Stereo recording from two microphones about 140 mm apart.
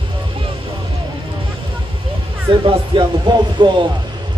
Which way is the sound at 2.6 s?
40° right (ahead or behind).